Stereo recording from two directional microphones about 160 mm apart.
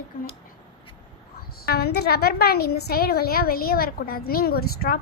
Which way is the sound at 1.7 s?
85° left.